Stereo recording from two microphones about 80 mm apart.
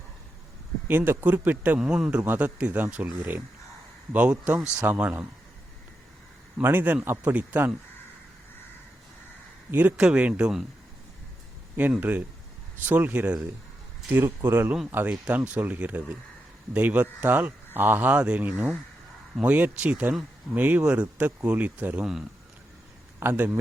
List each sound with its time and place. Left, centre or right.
0.9 s speech: right
6.6 s speech: right
10.0 s speech: centre
11.8 s speech: right
22.0 s speech: centre
23.2 s speech: right